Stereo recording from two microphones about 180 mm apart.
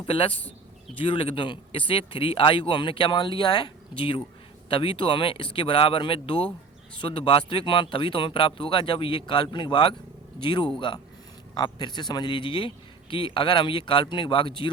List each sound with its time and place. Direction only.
0.0 s speech: 30° left (ahead or behind)